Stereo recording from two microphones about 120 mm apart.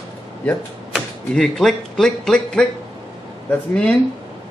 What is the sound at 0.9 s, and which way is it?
Speech, 5° left (ahead or behind).